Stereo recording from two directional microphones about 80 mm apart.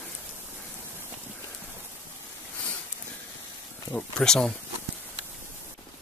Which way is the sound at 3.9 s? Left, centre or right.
Centre.